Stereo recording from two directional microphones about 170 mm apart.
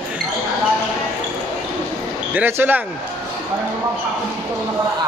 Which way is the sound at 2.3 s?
10° right (ahead or behind).